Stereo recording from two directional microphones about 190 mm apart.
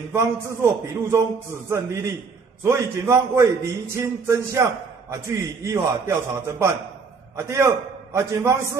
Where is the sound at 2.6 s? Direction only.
15° right (ahead or behind).